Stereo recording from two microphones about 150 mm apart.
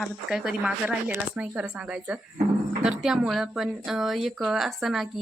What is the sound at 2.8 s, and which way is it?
Speech, 5° right (ahead or behind).